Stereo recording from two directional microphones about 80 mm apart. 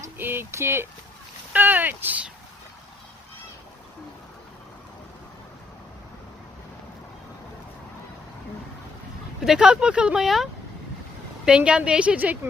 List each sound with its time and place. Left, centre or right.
0.2 s a sound: right
9.4 s a woman's voice: centre
11.4 s a woman's voice: centre